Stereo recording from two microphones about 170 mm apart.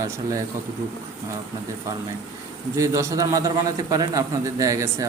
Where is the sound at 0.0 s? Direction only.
20° right (ahead or behind).